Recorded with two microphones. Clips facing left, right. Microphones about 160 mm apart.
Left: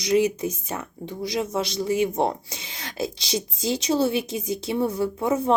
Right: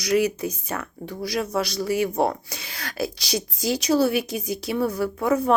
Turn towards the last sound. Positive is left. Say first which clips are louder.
# right 1 dB
turn(degrees=25)  # may be behind; listen again after turning